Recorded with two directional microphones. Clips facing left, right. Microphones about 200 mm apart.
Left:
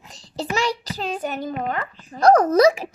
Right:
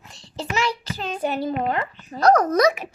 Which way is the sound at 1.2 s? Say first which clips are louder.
Right 3 dB; 30° right (ahead or behind).